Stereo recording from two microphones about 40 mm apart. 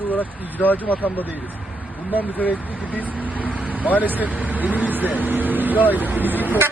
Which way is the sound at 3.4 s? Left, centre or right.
Right.